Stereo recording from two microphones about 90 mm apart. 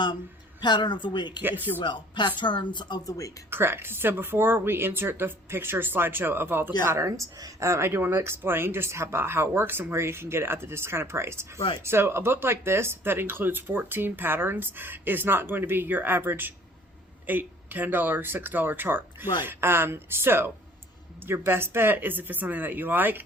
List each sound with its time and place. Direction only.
0.6 s a woman's voice: 55° left (ahead or behind)
1.4 s speech: 20° right (ahead or behind)
1.8 s a woman's voice: 60° left (ahead or behind)
3.1 s speech: 40° left (ahead or behind)
3.5 s a woman's voice: 25° right (ahead or behind)